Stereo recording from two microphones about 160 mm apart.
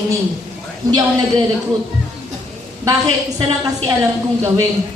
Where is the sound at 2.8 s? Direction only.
20° right (ahead or behind).